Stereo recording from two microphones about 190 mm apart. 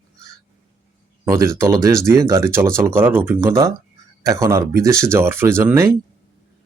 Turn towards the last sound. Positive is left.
turn(degrees=-15)  # may be behind; listen again after turning